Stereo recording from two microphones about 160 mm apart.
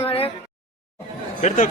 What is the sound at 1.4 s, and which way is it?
Speech, 50° left (ahead or behind).